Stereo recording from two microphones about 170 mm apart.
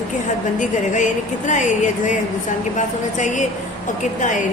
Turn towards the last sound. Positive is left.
turn(degrees=50)  # may be behind; listen again after turning